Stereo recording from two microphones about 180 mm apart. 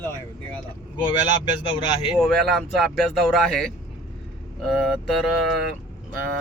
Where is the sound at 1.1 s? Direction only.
25° left (ahead or behind).